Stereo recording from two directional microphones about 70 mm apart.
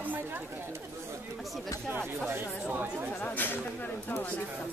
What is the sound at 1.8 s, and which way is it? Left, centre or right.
Speech, right.